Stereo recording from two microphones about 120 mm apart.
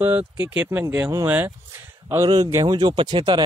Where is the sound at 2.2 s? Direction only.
30° right (ahead or behind).